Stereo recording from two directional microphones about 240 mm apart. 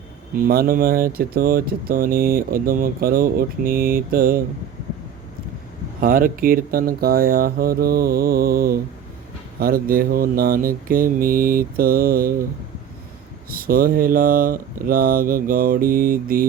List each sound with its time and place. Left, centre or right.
0.3 s speech: right
6.0 s speech: right
13.5 s speech: right